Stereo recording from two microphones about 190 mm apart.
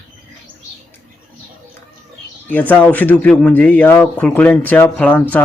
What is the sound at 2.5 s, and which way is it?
Speech, 10° left (ahead or behind).